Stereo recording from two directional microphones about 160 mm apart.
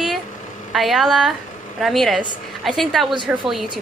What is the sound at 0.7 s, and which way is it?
A woman's voice, centre (ahead or behind).